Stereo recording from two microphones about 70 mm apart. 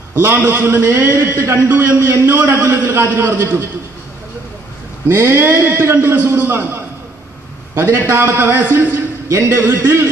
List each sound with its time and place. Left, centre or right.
0.1 s a man's voice: right
5.1 s a man's voice: right
7.9 s a man's voice: right